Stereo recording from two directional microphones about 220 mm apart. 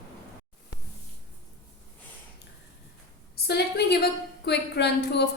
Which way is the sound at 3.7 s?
45° left (ahead or behind).